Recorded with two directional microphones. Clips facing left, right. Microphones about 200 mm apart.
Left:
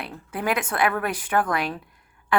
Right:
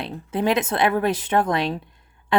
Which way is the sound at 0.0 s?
25° right (ahead or behind).